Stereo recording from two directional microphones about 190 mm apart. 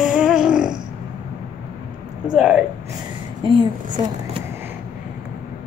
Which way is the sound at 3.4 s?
25° right (ahead or behind).